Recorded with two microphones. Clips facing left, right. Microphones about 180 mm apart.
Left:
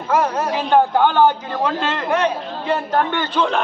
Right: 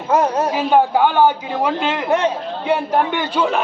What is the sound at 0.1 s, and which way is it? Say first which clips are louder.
Speech: right 2 dB; 25° right (ahead or behind).